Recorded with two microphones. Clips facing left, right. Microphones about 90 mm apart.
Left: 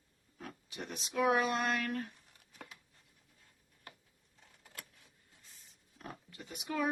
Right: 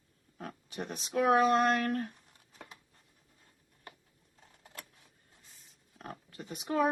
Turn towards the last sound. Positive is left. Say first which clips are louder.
# right 6 dB
turn(degrees=-35)  # may be behind; listen again after turning